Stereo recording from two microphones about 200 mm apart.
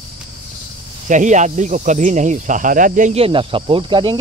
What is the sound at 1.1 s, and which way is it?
Speech, 40° right (ahead or behind).